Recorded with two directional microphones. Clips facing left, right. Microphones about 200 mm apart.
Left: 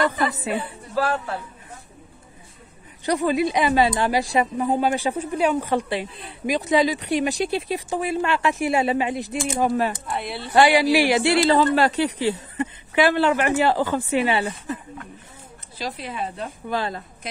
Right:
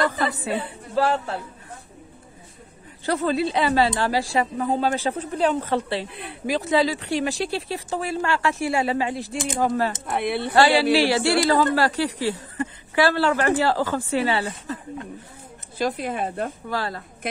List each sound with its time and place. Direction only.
0.3 s a woman's voice: 20° left (ahead or behind)
0.9 s a man's voice: 25° right (ahead or behind)
3.1 s speech: 15° left (ahead or behind)
10.0 s a woman's voice: 60° right (ahead or behind)
10.5 s a woman's voice: 15° left (ahead or behind)
15.8 s speech: 50° right (ahead or behind)
16.6 s a woman's voice: 20° left (ahead or behind)